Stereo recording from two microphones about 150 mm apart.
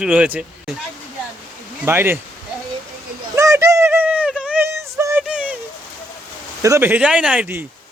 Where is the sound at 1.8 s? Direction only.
15° right (ahead or behind).